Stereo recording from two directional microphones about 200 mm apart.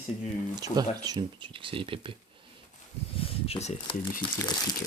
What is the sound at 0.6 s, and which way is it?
Speech, 20° right (ahead or behind).